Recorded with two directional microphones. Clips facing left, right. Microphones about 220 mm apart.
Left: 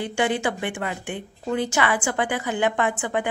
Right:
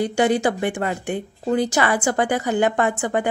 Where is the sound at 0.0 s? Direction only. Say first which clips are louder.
Right 5 dB; 40° right (ahead or behind).